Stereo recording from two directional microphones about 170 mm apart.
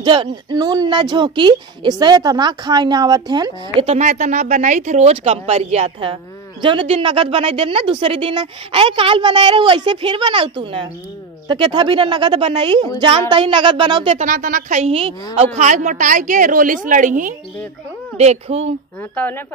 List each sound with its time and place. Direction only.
0.0 s a woman's voice: 30° right (ahead or behind)
3.8 s a woman's voice: 45° right (ahead or behind)
14.2 s speech: 50° right (ahead or behind)
18.1 s a woman's voice: 40° right (ahead or behind)
19.1 s speech: 10° left (ahead or behind)